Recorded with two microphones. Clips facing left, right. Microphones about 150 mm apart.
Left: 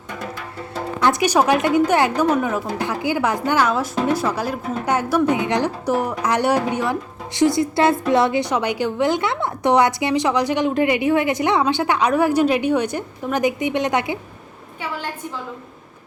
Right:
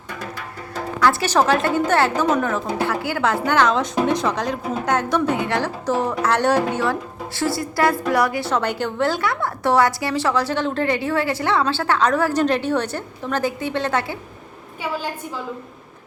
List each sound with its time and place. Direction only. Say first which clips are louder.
0.7 s a woman's voice: even; 20° left (ahead or behind)